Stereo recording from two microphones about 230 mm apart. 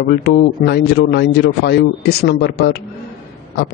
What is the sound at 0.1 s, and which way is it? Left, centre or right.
A man's voice, left.